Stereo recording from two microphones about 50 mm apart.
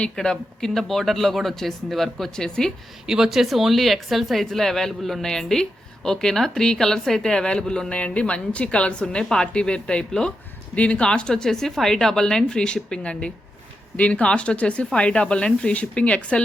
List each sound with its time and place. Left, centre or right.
0.2 s speech: centre
3.1 s speech: centre; by 16.4 s left